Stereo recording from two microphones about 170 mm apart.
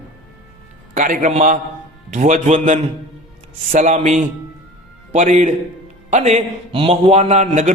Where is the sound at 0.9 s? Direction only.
50° right (ahead or behind).